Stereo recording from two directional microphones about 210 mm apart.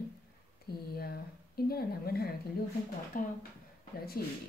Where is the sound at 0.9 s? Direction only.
45° left (ahead or behind).